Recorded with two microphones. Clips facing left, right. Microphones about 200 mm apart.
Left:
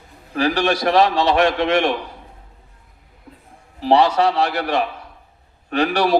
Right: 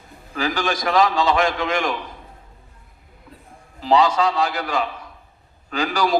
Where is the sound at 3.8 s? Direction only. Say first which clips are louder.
Left 2 dB; 65° left (ahead or behind).